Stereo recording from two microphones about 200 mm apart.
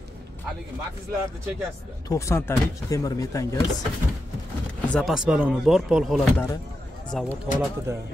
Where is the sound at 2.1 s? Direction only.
15° left (ahead or behind).